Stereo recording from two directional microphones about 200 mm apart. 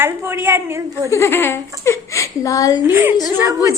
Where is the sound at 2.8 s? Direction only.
10° right (ahead or behind).